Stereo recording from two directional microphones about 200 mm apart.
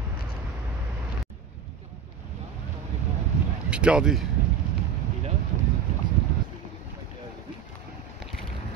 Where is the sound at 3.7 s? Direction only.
5° right (ahead or behind).